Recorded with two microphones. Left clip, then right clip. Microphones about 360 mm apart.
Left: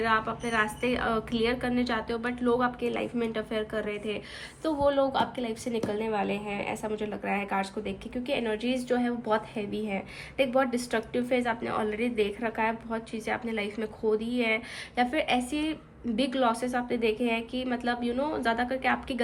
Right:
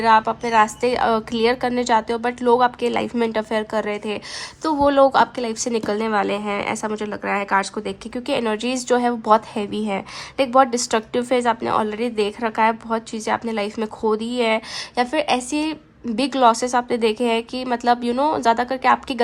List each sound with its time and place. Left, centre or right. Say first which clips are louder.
0.0 s a woman's voice: right 11 dB; centre
6.1 s a woman's voice: right 10 dB; right
6.8 s a woman's voice: right 7 dB; centre